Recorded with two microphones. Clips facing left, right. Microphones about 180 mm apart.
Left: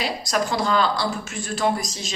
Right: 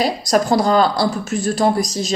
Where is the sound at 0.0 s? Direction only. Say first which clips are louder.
Right 7 dB; 40° right (ahead or behind).